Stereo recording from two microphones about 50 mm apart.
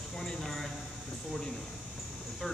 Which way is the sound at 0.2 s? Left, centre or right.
Centre.